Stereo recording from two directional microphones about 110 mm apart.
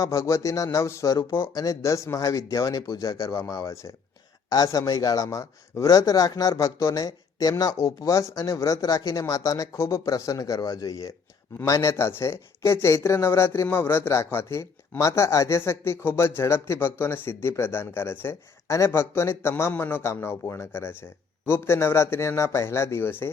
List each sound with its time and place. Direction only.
0.0 s speech: 30° left (ahead or behind)